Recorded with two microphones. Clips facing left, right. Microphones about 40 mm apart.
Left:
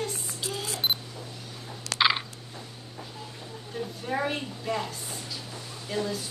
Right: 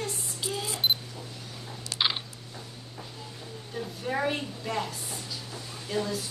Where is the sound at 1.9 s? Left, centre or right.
Left.